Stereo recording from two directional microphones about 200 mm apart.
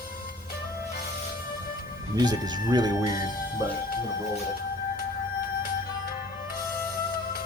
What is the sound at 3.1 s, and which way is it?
Speech, 50° left (ahead or behind).